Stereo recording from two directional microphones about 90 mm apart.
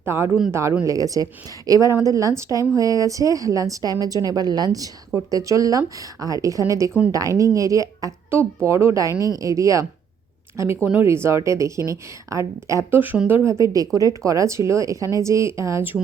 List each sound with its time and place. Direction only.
0.0 s a man's voice: 25° right (ahead or behind)
0.7 s speech: 40° right (ahead or behind)
12.9 s speech: 20° right (ahead or behind)
13.5 s speech: 35° right (ahead or behind)